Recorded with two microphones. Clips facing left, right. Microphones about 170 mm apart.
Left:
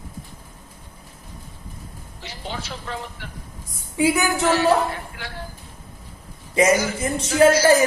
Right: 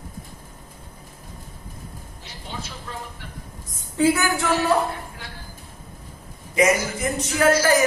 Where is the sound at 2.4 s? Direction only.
85° left.